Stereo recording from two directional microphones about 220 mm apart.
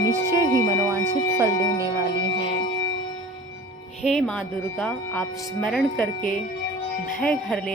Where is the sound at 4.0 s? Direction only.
Centre (ahead or behind).